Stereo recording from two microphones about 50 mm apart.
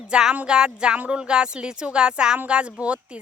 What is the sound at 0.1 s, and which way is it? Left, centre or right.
Speech, centre.